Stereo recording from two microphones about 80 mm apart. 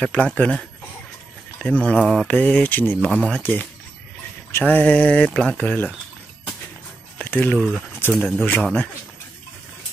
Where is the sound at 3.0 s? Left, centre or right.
Centre.